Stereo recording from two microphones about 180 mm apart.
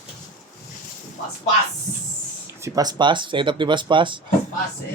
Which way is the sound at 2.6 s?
20° right (ahead or behind).